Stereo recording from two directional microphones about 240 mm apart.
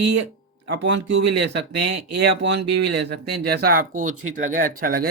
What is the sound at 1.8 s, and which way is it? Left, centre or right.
Speech, right.